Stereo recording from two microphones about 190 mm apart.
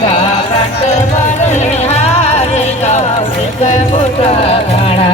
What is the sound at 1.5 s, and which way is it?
Music, 35° left (ahead or behind).